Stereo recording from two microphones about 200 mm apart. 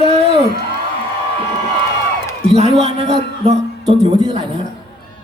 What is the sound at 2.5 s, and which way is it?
A man's voice, 30° right (ahead or behind).